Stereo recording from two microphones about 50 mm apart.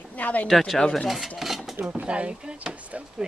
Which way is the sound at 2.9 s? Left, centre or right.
Right.